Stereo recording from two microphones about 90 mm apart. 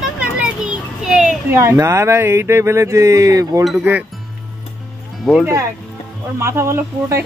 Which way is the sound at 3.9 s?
20° right (ahead or behind).